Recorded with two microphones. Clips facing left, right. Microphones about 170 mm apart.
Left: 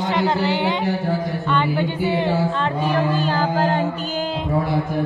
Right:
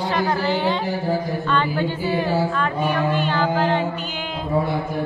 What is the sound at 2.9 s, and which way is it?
Music, 35° left (ahead or behind).